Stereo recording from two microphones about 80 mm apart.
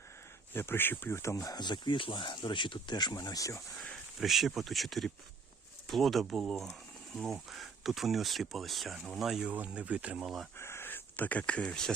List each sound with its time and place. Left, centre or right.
0.5 s speech: left
1.6 s speech: left
4.2 s speech: centre
9.5 s speech: centre
10.6 s speech: left; by 11.9 s centre